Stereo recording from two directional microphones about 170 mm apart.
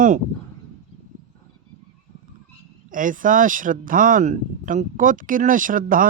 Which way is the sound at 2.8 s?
50° right (ahead or behind).